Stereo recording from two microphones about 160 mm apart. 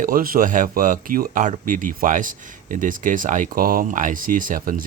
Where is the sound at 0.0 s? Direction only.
65° right (ahead or behind).